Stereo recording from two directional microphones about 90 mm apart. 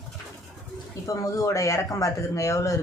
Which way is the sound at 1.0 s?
40° left (ahead or behind).